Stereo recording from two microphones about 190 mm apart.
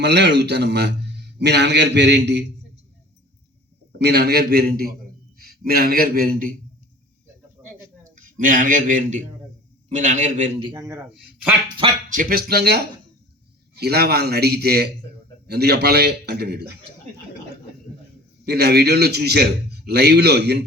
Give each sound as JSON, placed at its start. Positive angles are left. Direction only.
{"t": 0.0, "sound": "a man's voice", "side_deg": -65}
{"t": 3.9, "sound": "a man's voice", "side_deg": -55}
{"t": 7.6, "sound": "a sound", "side_deg": -20}
{"t": 8.1, "sound": "a man's voice", "side_deg": -45}
{"t": 10.6, "sound": "a man's voice", "side_deg": -20}
{"t": 12.0, "sound": "a man's voice", "side_deg": -45}
{"t": 18.4, "sound": "a man's voice", "side_deg": -60}